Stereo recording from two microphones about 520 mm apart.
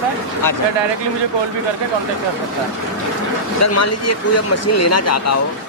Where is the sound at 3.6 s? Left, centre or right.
Left.